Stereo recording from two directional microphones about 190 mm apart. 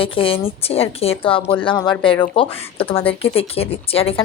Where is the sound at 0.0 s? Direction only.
30° left (ahead or behind).